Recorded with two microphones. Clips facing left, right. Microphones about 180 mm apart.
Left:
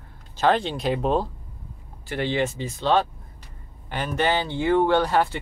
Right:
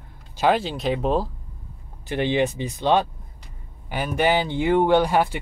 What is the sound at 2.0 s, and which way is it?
Speech, 20° right (ahead or behind).